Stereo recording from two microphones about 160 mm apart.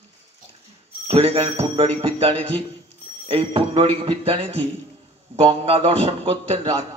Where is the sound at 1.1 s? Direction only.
35° right (ahead or behind).